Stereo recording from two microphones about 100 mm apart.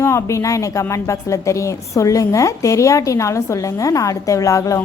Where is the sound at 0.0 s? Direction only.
30° left (ahead or behind).